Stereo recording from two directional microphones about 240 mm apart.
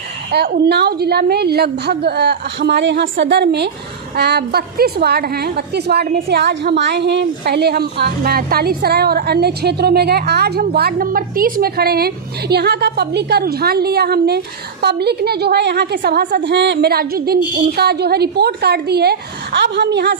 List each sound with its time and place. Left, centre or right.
0.3 s a woman's voice: right